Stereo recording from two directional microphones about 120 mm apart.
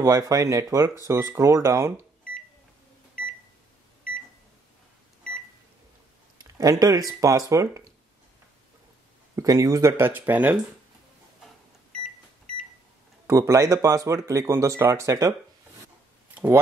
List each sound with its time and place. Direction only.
0.0 s speech: 25° right (ahead or behind)
6.3 s speech: 30° right (ahead or behind)
9.3 s speech: 30° right (ahead or behind); by 10.6 s 15° right (ahead or behind)
13.3 s speech: 25° right (ahead or behind)